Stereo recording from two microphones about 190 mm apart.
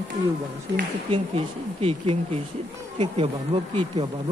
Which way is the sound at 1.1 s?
30° right (ahead or behind).